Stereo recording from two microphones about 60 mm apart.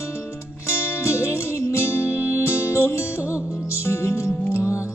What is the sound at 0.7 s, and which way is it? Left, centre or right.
Music, left.